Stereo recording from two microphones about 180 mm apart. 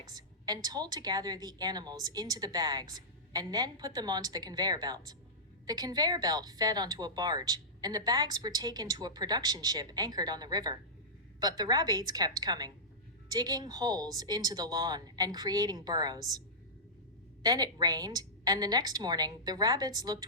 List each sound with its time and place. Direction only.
0.1 s a woman's voice: 20° right (ahead or behind)
17.4 s a woman's voice: 20° right (ahead or behind)